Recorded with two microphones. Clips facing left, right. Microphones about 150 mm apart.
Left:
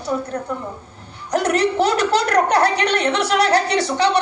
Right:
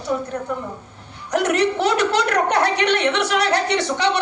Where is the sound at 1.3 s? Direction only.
35° left (ahead or behind).